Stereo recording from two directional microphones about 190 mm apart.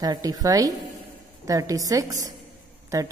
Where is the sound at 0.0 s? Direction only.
20° right (ahead or behind).